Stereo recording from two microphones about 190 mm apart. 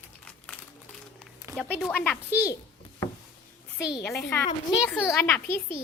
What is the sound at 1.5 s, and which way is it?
Speech, centre (ahead or behind).